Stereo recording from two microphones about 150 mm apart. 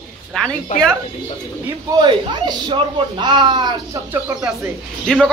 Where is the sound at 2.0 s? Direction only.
30° right (ahead or behind).